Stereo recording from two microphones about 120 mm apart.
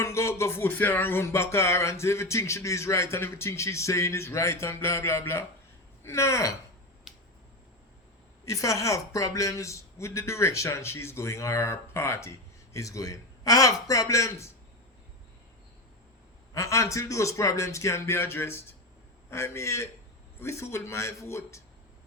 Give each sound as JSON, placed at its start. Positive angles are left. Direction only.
{"t": 0.0, "sound": "music", "side_deg": 25}
{"t": 6.0, "sound": "speech", "side_deg": 25}
{"t": 7.1, "sound": "finger snapping", "side_deg": 0}
{"t": 8.4, "sound": "music", "side_deg": 25}
{"t": 16.6, "sound": "music", "side_deg": 25}